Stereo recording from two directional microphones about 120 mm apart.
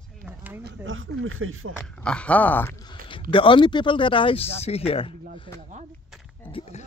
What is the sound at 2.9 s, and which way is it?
Speech, 45° left (ahead or behind).